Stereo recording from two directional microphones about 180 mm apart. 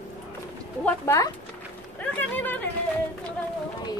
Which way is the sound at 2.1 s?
10° left (ahead or behind).